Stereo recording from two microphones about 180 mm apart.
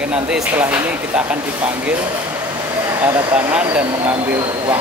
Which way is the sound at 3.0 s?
10° right (ahead or behind).